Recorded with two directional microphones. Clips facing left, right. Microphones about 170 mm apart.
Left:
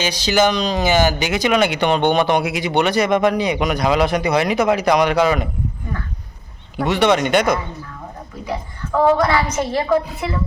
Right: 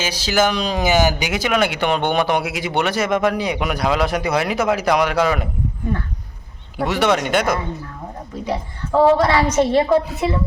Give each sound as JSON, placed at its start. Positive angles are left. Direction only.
{"t": 0.0, "sound": "speech", "side_deg": -5}
{"t": 6.7, "sound": "speech", "side_deg": -5}
{"t": 8.4, "sound": "a woman's voice", "side_deg": -25}